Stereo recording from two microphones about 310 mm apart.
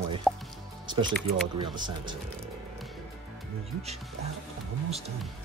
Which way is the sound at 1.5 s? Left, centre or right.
Centre.